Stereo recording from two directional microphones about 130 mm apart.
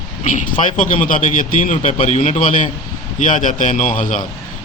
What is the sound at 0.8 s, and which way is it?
A man's voice, 90° left.